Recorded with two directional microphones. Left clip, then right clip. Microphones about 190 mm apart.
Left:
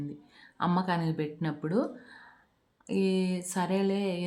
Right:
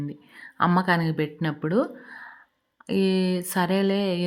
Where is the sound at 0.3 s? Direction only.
25° right (ahead or behind).